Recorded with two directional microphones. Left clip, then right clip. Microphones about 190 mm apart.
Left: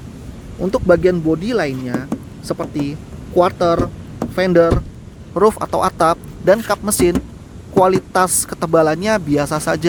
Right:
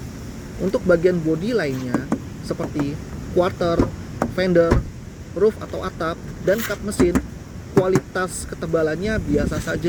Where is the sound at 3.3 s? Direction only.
55° left (ahead or behind).